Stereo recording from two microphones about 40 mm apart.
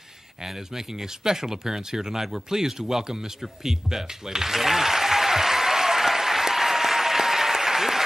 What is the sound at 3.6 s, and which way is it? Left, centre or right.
Applause, centre.